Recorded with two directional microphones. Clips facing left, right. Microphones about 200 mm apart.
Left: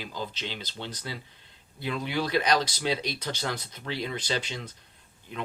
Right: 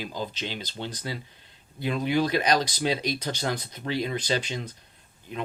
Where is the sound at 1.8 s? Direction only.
15° right (ahead or behind).